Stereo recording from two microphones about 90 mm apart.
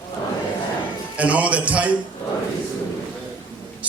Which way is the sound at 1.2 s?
15° right (ahead or behind).